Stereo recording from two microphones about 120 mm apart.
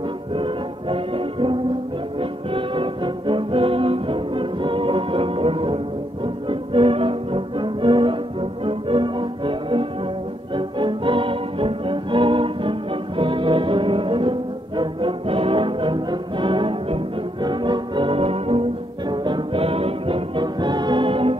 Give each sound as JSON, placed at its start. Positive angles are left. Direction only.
{"t": 0.4, "sound": "music", "side_deg": -50}